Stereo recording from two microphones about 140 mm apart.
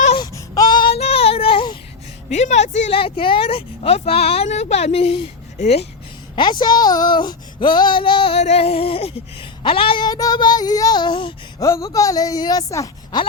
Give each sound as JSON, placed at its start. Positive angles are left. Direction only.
{"t": 0.2, "sound": "child singing", "side_deg": 25}
{"t": 0.9, "sound": "a sound", "side_deg": 45}
{"t": 2.3, "sound": "speech", "side_deg": 55}
{"t": 2.9, "sound": "speech", "side_deg": 40}
{"t": 6.3, "sound": "speech", "side_deg": 35}
{"t": 11.6, "sound": "speech", "side_deg": 25}